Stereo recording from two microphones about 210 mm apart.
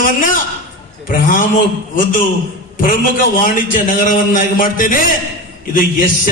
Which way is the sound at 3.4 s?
40° left (ahead or behind).